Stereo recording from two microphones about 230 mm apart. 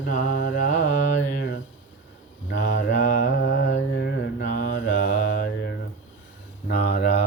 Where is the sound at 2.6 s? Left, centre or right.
Left.